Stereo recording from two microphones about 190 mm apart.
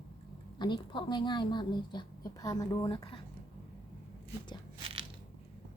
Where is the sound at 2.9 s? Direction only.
30° left (ahead or behind).